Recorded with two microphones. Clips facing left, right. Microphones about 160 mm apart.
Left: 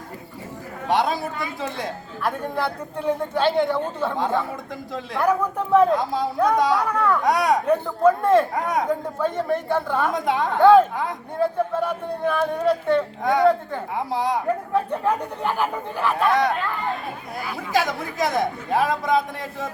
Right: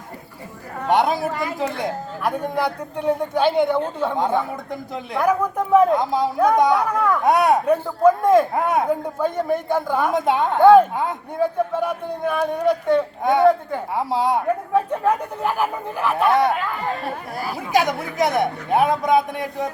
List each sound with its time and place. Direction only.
0.9 s a woman's voice: 20° right (ahead or behind)
1.3 s a woman's voice: 75° right (ahead or behind)
1.8 s speech: 15° right (ahead or behind)
6.0 s a man's voice: 20° right (ahead or behind)
6.9 s speech: 10° right (ahead or behind)
7.2 s a man's voice: 25° right (ahead or behind)
7.7 s speech: 10° right (ahead or behind)
8.5 s a man's voice: 25° right (ahead or behind)
8.9 s speech: 10° right (ahead or behind)
10.1 s a man's voice: 25° right (ahead or behind)
10.6 s speech: 10° right (ahead or behind)
13.2 s a man's voice: 25° right (ahead or behind)
14.7 s speech: 10° right (ahead or behind)
17.7 s a man's voice: 20° right (ahead or behind)